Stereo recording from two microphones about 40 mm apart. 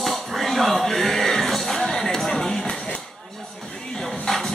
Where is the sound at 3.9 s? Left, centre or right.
Centre.